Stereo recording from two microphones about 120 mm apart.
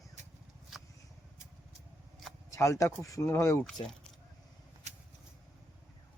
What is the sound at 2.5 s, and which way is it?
Speech, 25° left (ahead or behind).